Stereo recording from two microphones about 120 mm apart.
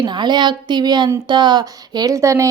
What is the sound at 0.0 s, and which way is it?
A woman's voice, 40° right (ahead or behind).